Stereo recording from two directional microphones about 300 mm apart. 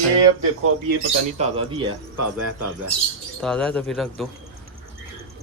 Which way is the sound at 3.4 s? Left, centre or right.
Centre.